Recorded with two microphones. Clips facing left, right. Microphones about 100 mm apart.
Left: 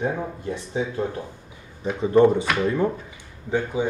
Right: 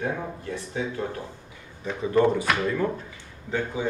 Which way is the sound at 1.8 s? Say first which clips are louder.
Left 5 dB; 25° left (ahead or behind).